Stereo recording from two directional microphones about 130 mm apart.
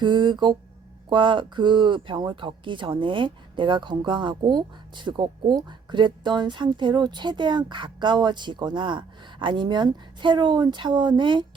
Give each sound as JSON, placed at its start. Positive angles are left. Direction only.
{"t": 0.0, "sound": "speech", "side_deg": -40}